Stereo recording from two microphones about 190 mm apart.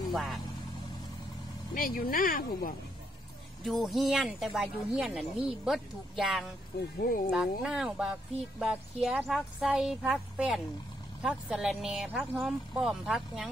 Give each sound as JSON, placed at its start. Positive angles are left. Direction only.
{"t": 0.1, "sound": "speech", "side_deg": 0}
{"t": 1.7, "sound": "speech", "side_deg": 45}
{"t": 3.6, "sound": "speech", "side_deg": 0}
{"t": 7.0, "sound": "speech", "side_deg": 50}
{"t": 7.2, "sound": "speech", "side_deg": 0}